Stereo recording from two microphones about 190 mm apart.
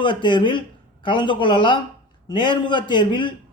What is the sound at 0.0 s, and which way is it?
A man's voice, 25° left (ahead or behind).